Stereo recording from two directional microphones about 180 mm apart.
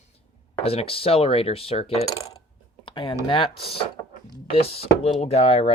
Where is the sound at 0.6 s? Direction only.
30° left (ahead or behind).